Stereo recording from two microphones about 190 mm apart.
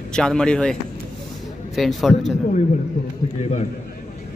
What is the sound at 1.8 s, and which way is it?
Speech, centre (ahead or behind).